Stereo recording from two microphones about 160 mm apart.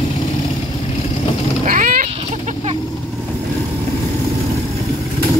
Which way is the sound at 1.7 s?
55° right (ahead or behind).